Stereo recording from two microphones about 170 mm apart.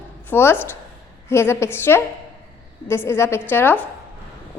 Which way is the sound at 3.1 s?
15° left (ahead or behind).